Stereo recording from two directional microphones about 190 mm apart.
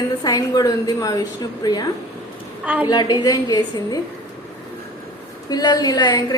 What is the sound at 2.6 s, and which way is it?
Speech, 10° right (ahead or behind).